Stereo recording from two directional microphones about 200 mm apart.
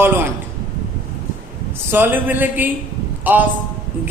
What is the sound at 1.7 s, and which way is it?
A man's voice, 10° right (ahead or behind).